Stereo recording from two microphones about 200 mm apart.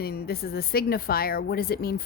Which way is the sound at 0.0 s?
50° left (ahead or behind).